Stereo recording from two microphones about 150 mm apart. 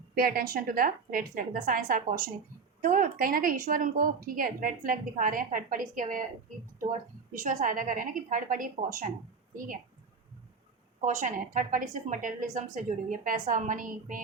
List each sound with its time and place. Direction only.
0.1 s a woman's voice: 80° right; by 6.2 s 65° right (ahead or behind)
7.3 s a woman's voice: 60° right (ahead or behind)
11.0 s a woman's voice: 55° right (ahead or behind)